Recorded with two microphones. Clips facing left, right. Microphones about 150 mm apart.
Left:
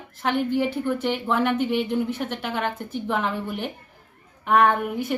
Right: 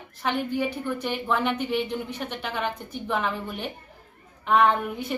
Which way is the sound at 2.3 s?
15° left (ahead or behind).